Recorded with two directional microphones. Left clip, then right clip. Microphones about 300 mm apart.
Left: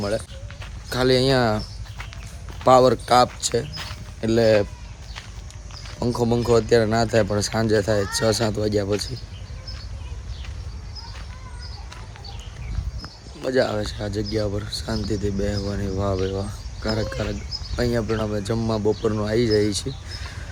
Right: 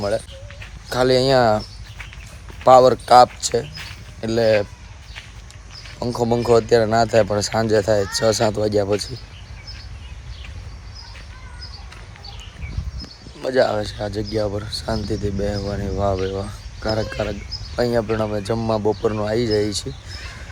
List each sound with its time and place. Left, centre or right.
0.9 s speech: centre
6.0 s speech: centre
13.4 s speech: centre